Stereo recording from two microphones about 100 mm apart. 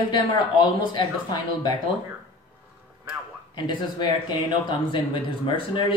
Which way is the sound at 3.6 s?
50° left (ahead or behind).